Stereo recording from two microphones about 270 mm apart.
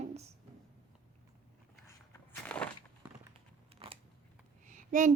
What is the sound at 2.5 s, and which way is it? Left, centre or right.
Walk, centre.